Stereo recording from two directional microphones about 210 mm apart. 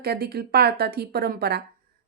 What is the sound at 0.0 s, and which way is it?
A woman's voice, 45° right (ahead or behind).